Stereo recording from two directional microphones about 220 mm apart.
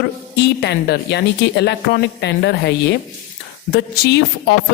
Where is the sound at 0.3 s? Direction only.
50° left (ahead or behind).